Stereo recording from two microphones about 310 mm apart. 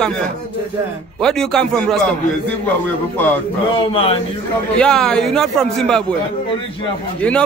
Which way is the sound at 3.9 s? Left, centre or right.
Centre.